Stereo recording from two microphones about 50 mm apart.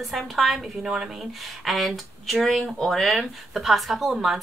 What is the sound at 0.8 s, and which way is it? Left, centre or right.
Speech, centre.